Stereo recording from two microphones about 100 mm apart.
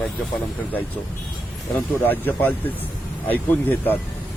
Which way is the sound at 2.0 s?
20° left (ahead or behind).